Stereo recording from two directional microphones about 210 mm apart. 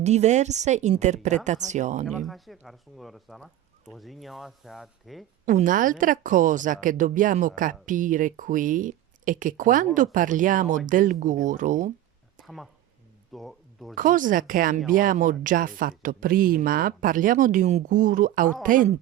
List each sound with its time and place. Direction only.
0.0 s speech: 30° right (ahead or behind)
2.0 s speech: centre (ahead or behind)
5.5 s speech: 40° right (ahead or behind)
13.3 s speech: centre (ahead or behind)
13.9 s speech: 40° right (ahead or behind)